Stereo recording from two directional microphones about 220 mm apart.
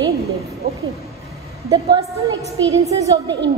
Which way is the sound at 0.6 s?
50° right (ahead or behind).